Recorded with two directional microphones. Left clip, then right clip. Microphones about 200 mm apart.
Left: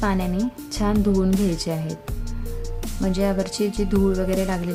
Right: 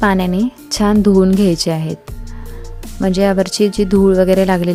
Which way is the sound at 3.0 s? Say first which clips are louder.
Right 9 dB; 40° right (ahead or behind).